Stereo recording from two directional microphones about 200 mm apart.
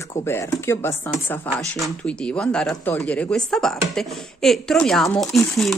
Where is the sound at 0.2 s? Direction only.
15° left (ahead or behind).